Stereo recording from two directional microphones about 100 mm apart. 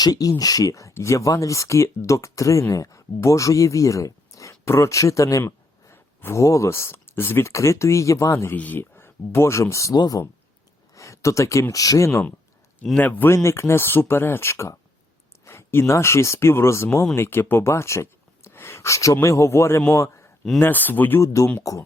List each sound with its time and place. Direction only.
0.0 s speech: 40° left (ahead or behind)
8.5 s speech: 15° left (ahead or behind); by 10.2 s 35° left (ahead or behind)
10.9 s a sound: 30° left (ahead or behind)
11.7 s speech: 35° left (ahead or behind)
13.0 s a man's voice: 20° left (ahead or behind)
20.6 s speech: 20° left (ahead or behind)
21.2 s speech: 30° left (ahead or behind)